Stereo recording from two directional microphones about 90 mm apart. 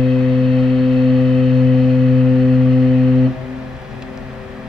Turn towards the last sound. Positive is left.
turn(degrees=0)  # may be behind; listen again after turning